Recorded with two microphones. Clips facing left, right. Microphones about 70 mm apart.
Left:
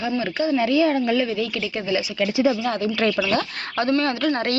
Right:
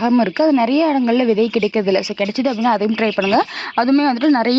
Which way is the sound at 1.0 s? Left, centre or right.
Centre.